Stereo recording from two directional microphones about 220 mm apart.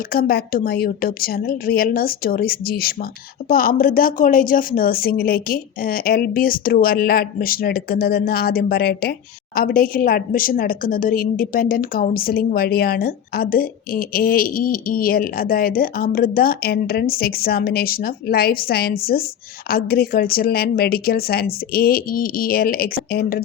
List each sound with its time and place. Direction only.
0.1 s a woman's voice: 45° left (ahead or behind)